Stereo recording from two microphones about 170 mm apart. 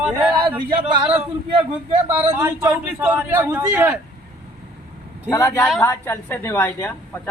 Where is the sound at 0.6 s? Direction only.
25° right (ahead or behind).